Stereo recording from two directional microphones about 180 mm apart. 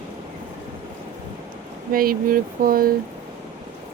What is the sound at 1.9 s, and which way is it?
Speech, 50° right (ahead or behind).